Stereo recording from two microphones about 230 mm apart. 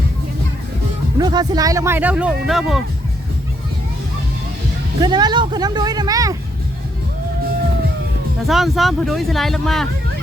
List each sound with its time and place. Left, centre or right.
1.2 s speech: centre
4.9 s speech: centre
8.4 s speech: centre